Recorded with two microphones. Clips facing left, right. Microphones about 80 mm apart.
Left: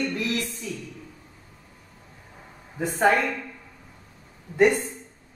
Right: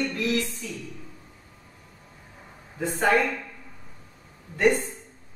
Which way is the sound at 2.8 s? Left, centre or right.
Centre.